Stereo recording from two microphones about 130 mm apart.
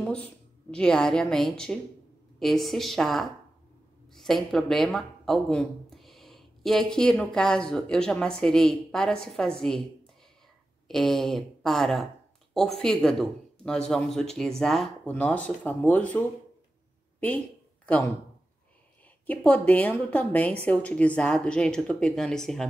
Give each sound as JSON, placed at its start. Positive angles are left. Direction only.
{"t": 0.0, "sound": "a woman's voice", "side_deg": 10}
{"t": 10.9, "sound": "speech", "side_deg": 0}
{"t": 19.2, "sound": "a woman's voice", "side_deg": 10}